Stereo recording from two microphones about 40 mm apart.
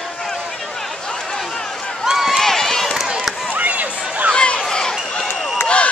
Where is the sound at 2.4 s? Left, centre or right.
Centre.